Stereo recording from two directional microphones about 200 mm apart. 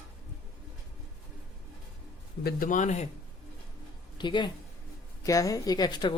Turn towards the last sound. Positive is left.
turn(degrees=20)  # may be behind; listen again after turning